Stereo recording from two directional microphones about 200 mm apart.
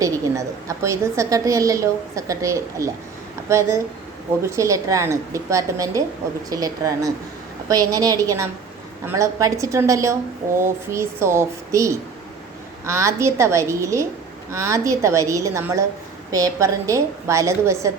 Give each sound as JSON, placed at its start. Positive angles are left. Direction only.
{"t": 0.0, "sound": "a woman's voice", "side_deg": -15}